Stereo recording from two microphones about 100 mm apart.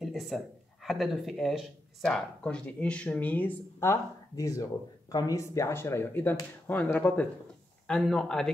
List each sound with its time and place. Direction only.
0.0 s a sound: centre (ahead or behind)
0.8 s speech: centre (ahead or behind); by 3.5 s 15° left (ahead or behind)
3.8 s speech: 30° left (ahead or behind); by 7.2 s 15° left (ahead or behind)
7.8 s speech: 5° left (ahead or behind)